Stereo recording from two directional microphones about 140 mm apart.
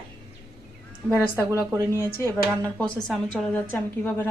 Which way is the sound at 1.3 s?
20° right (ahead or behind).